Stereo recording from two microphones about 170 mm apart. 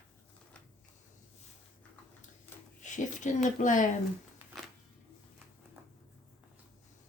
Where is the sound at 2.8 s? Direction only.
45° left (ahead or behind).